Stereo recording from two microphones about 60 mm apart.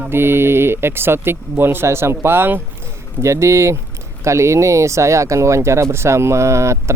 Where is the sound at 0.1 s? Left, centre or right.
Right.